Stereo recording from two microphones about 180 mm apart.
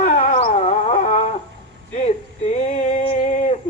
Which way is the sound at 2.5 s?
40° left (ahead or behind).